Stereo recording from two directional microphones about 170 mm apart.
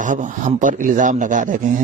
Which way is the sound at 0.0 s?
50° right (ahead or behind).